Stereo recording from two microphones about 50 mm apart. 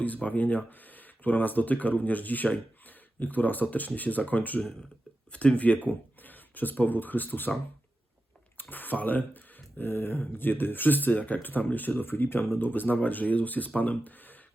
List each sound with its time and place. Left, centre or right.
0.0 s speech: left
8.7 s speech: left